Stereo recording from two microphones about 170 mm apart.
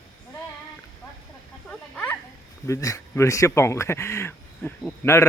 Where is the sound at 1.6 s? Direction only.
10° left (ahead or behind).